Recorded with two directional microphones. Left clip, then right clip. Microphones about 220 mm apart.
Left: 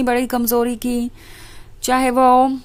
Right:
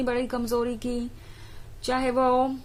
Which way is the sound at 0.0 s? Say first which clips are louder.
Left 9 dB; 35° left (ahead or behind).